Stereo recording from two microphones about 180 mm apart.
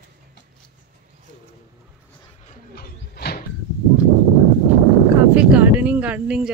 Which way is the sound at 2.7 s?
60° left (ahead or behind).